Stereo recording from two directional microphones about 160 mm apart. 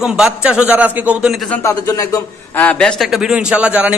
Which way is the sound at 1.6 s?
20° left (ahead or behind).